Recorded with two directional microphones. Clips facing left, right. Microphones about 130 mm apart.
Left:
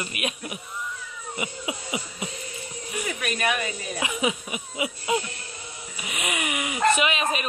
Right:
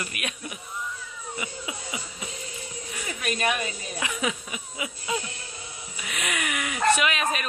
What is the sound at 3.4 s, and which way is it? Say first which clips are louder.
Speech: even; 20° right (ahead or behind).